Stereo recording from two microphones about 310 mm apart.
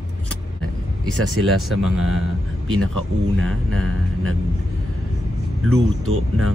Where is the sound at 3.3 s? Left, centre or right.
Right.